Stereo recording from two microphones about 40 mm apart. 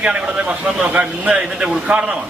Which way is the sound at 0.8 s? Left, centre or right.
Right.